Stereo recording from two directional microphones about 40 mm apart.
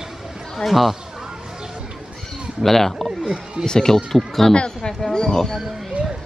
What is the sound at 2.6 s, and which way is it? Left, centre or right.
Speech, centre.